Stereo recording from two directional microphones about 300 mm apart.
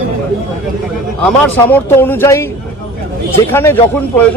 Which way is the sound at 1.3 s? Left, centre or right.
Centre.